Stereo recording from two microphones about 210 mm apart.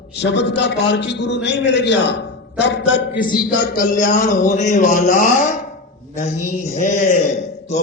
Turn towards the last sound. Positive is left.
turn(degrees=35)  # may be behind; listen again after turning